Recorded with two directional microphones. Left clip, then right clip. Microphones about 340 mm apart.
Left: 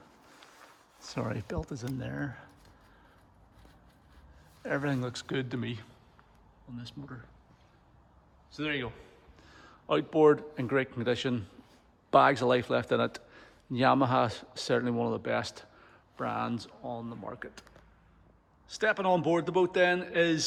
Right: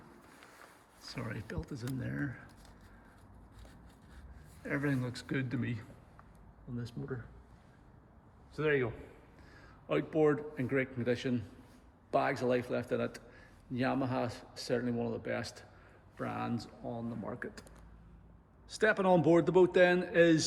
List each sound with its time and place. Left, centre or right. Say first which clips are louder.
1.1 s speech: left 7 dB; centre
4.7 s speech: left 4 dB; centre
8.5 s speech: right 2 dB; centre
9.5 s a man's voice: left 5 dB; centre
18.7 s speech: left 1 dB; centre